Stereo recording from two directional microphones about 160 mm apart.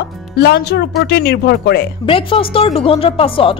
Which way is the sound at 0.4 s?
85° left.